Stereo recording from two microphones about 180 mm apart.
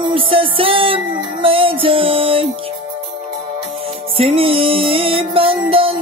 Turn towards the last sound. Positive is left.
turn(degrees=-30)  # may be behind; listen again after turning